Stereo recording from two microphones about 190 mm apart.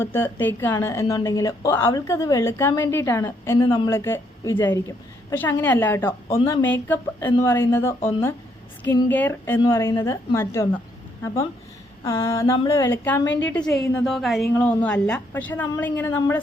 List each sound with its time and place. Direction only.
0.0 s a woman's voice: 10° left (ahead or behind)
12.0 s a woman's voice: 15° left (ahead or behind)